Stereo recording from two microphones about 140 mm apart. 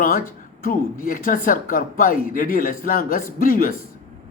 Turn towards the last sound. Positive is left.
turn(degrees=80)